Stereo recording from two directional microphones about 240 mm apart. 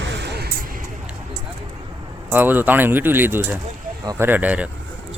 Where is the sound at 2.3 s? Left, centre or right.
Centre.